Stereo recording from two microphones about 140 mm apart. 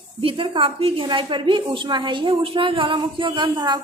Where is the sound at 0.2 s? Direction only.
40° right (ahead or behind).